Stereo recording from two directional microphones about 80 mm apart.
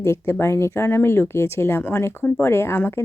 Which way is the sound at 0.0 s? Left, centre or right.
Left.